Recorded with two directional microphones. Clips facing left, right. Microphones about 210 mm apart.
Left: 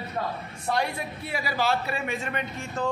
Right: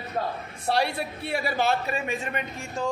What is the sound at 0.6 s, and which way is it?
A man's voice, 30° right (ahead or behind).